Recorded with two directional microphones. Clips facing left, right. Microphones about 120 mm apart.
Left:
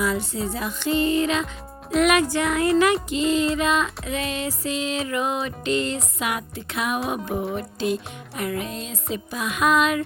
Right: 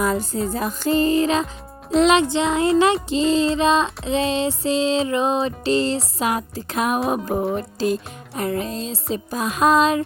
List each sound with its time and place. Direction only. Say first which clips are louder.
0.0 s music: right 3 dB; 45° right (ahead or behind)